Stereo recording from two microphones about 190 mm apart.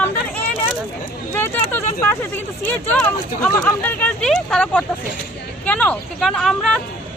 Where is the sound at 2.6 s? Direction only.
10° left (ahead or behind).